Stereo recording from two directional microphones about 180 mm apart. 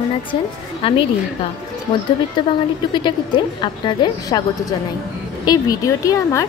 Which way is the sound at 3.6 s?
25° left (ahead or behind).